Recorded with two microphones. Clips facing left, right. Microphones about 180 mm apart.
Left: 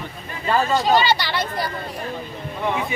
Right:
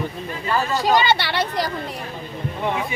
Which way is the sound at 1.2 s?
65° right (ahead or behind).